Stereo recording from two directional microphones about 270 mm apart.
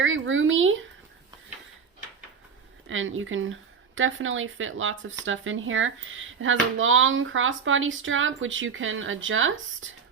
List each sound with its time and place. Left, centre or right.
0.0 s speech: right
2.9 s speech: right